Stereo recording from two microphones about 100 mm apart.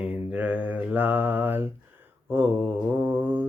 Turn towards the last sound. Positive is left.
turn(degrees=-15)  # may be behind; listen again after turning